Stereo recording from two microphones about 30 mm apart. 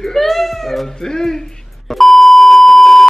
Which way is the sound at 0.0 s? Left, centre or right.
Centre.